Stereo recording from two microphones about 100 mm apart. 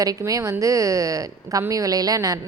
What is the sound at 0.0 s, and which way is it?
A woman's voice, 35° right (ahead or behind).